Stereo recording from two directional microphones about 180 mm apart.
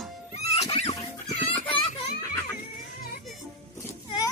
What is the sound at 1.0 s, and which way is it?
Children playing, 25° left (ahead or behind).